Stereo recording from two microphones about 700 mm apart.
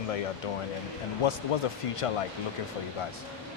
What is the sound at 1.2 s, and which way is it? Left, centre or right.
Speech, left.